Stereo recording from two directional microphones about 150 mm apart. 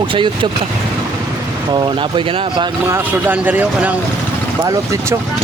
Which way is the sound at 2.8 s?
15° right (ahead or behind).